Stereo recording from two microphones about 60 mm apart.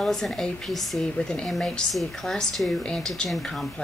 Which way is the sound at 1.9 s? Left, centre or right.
Centre.